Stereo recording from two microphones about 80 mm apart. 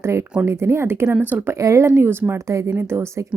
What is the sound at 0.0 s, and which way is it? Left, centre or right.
Speech, right.